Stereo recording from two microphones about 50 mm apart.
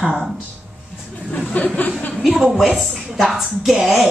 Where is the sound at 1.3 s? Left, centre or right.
Centre.